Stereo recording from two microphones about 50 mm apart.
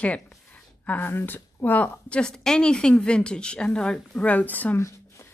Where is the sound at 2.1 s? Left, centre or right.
Centre; by 4.8 s left.